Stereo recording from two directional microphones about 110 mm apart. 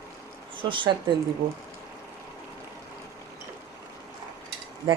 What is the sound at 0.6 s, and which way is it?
Speech, 50° right (ahead or behind).